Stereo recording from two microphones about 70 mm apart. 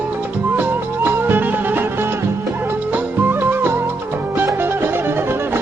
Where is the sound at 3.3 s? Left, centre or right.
Right.